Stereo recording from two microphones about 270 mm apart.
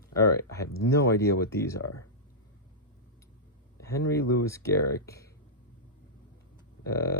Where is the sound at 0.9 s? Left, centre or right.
Centre.